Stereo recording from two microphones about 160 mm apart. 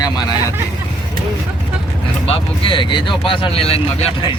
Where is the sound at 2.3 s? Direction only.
30° left (ahead or behind).